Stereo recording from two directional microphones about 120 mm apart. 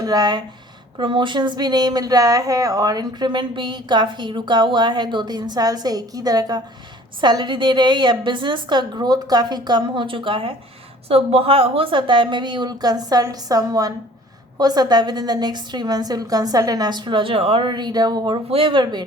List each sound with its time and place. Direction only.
0.0 s speech: 35° right (ahead or behind)
18.5 s speech: 45° right (ahead or behind)